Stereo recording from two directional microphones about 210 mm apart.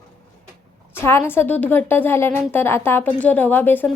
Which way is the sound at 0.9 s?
10° left (ahead or behind).